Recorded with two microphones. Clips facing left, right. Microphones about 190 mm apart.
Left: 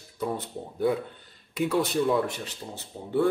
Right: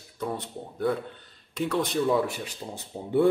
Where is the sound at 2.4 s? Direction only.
15° right (ahead or behind).